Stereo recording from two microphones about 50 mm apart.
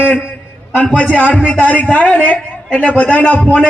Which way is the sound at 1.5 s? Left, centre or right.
Left.